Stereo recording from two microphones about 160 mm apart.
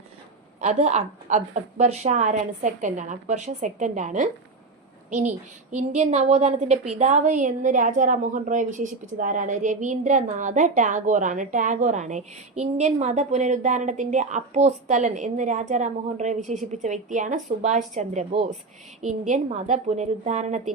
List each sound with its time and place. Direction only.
0.6 s a woman's voice: 45° right (ahead or behind)
5.7 s a woman's voice: 45° right (ahead or behind)